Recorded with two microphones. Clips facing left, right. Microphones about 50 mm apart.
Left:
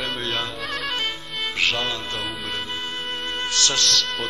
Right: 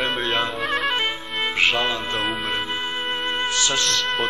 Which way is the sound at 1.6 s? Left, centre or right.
Centre.